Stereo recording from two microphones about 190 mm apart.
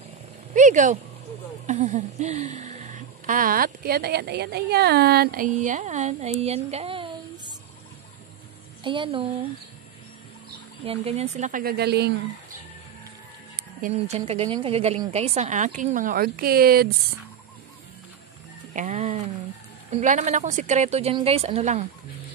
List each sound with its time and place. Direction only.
0.6 s speech: 40° right (ahead or behind)
8.8 s speech: 25° right (ahead or behind)
10.9 s speech: 35° right (ahead or behind); by 12.1 s 60° right (ahead or behind)
13.9 s speech: 35° right (ahead or behind); by 16.9 s 55° right (ahead or behind)
18.7 s a sound: 40° right (ahead or behind)
19.9 s speech: 40° right (ahead or behind)